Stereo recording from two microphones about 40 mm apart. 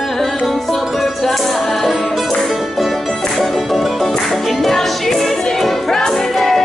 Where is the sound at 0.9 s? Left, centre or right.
Centre.